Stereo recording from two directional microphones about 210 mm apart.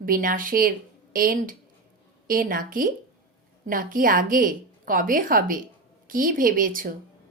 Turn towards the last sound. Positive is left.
turn(degrees=-40)  # may be behind; listen again after turning